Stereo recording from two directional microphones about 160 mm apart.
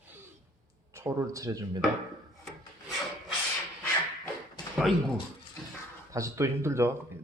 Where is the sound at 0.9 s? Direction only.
15° right (ahead or behind).